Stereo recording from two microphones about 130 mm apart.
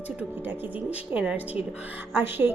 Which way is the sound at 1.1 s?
10° right (ahead or behind).